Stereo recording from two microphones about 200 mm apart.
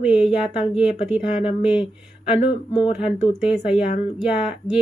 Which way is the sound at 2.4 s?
30° left (ahead or behind).